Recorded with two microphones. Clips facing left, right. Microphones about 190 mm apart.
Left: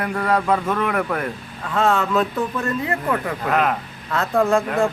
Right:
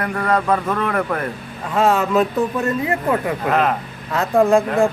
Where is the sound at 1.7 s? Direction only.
15° right (ahead or behind).